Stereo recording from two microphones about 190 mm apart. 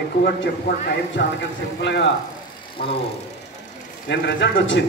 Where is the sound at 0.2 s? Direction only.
60° left (ahead or behind).